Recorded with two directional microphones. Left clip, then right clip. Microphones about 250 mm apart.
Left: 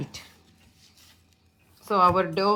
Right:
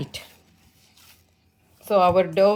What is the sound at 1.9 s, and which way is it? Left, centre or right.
Speech, right.